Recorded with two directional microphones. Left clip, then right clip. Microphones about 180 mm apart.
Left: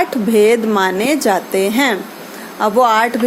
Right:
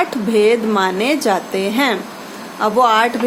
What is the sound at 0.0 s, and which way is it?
Speech, 20° left (ahead or behind).